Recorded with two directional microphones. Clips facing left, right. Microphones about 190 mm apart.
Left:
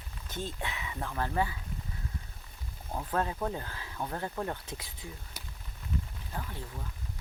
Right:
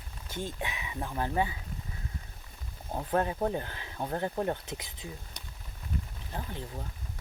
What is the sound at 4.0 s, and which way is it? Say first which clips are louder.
Speech: right 3 dB; 35° right (ahead or behind).